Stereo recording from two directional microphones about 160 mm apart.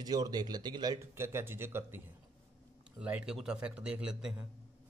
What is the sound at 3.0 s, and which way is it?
Speech, 5° right (ahead or behind).